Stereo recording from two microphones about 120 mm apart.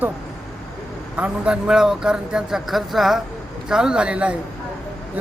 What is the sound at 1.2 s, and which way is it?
Speech, 10° right (ahead or behind).